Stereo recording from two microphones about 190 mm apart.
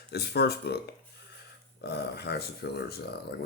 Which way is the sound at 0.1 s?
55° left (ahead or behind).